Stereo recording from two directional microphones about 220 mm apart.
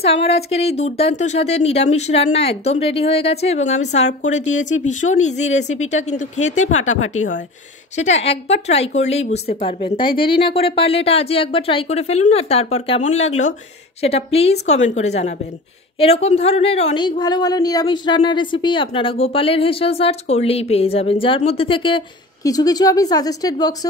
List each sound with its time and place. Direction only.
0.0 s a woman's voice: 25° left (ahead or behind)
6.7 s speech: 70° left (ahead or behind)
7.9 s a woman's voice: 30° left (ahead or behind)